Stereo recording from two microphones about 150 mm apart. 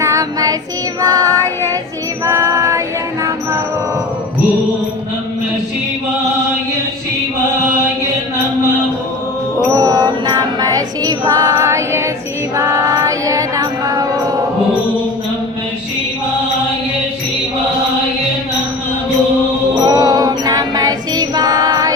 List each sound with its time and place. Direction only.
0.0 s child singing: 20° right (ahead or behind)
2.2 s female singing: 20° right (ahead or behind)
9.6 s music: 25° right (ahead or behind)
19.8 s music: 25° right (ahead or behind)